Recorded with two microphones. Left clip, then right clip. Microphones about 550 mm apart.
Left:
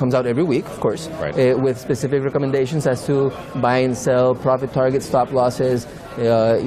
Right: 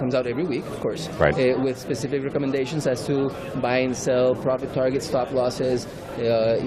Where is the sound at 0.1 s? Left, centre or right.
Left.